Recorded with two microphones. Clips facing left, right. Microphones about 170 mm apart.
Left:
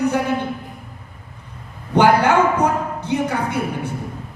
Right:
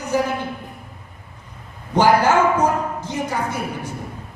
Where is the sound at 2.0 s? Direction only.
60° left (ahead or behind).